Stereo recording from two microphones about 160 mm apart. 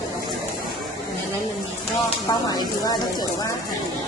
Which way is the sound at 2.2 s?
25° left (ahead or behind).